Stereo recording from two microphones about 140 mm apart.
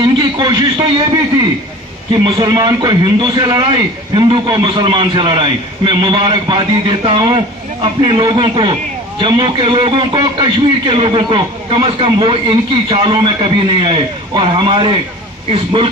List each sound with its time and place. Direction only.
0.0 s a man's voice: 30° right (ahead or behind)
2.2 s a man's voice: 30° right (ahead or behind)